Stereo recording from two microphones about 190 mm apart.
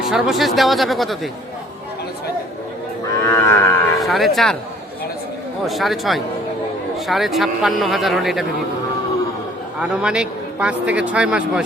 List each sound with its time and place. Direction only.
0.1 s a man's voice: centre (ahead or behind)
3.2 s moo: 15° left (ahead or behind)
4.0 s a man's voice: centre (ahead or behind)
5.6 s a man's voice: centre (ahead or behind)
9.9 s a man's voice: 5° right (ahead or behind)